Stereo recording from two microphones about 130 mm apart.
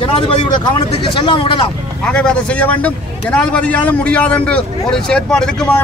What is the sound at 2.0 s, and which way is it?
A man's voice, 5° left (ahead or behind).